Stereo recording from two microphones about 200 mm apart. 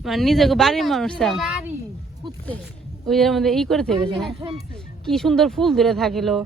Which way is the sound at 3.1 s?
Centre (ahead or behind).